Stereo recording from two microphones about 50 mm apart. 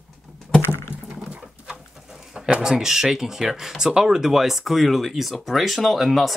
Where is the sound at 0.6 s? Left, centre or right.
Left.